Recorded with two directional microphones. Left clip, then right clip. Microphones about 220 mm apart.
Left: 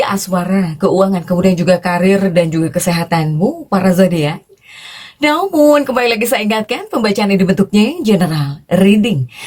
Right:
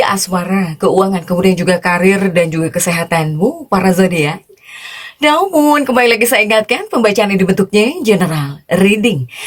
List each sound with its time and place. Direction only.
0.0 s speech: 30° right (ahead or behind)